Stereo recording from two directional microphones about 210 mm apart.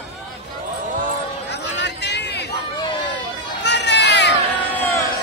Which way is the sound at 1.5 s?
55° left (ahead or behind).